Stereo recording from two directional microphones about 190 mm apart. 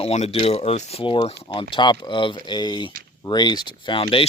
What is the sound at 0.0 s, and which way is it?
Speech, 35° left (ahead or behind).